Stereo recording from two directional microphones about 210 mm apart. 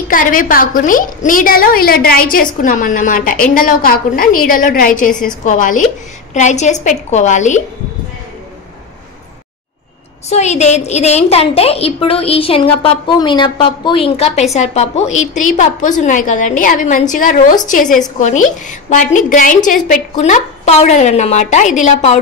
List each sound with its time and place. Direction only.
0.1 s a woman's voice: 40° left (ahead or behind)
10.3 s a woman's voice: 30° left (ahead or behind)